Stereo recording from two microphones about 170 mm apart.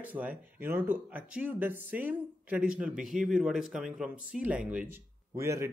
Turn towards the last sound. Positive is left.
turn(degrees=-15)  # may be behind; listen again after turning